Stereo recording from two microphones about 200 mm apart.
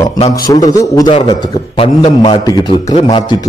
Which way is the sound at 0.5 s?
15° left (ahead or behind).